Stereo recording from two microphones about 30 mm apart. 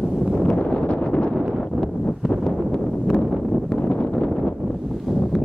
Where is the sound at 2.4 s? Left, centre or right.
Left.